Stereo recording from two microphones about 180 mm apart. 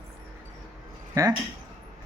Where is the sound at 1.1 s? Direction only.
20° right (ahead or behind).